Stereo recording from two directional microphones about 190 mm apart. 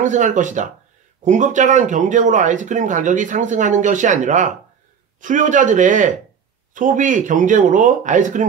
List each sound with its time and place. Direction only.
0.0 s speech: 40° right (ahead or behind)